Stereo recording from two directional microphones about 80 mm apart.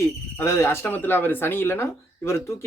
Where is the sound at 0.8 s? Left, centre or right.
Left.